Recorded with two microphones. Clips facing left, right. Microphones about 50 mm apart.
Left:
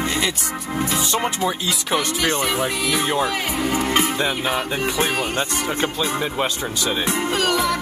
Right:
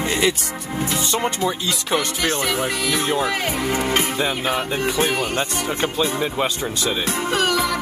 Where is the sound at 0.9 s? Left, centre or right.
Centre.